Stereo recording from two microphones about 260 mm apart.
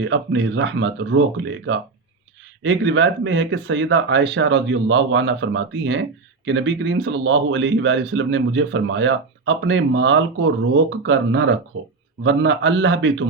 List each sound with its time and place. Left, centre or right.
0.0 s speech: right